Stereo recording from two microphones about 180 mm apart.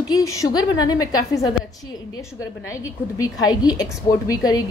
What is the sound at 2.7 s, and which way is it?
A woman's voice, 20° left (ahead or behind).